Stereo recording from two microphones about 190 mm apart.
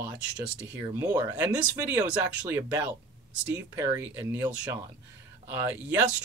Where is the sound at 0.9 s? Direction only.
15° right (ahead or behind).